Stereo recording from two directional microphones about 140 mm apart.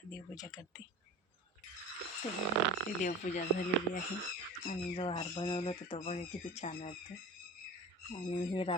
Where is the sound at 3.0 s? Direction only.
70° left (ahead or behind).